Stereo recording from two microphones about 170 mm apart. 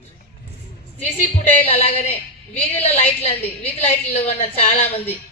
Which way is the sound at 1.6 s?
35° left (ahead or behind).